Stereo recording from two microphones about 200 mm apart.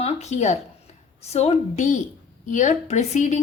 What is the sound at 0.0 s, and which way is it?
A woman's voice, 35° left (ahead or behind).